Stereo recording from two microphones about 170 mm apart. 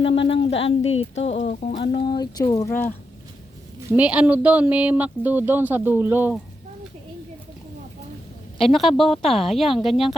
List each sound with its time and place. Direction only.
0.3 s speech: 35° left (ahead or behind)
1.8 s speech: 30° left (ahead or behind); by 2.9 s 15° left (ahead or behind)
3.9 s speech: 10° right (ahead or behind)
8.7 s speech: centre (ahead or behind)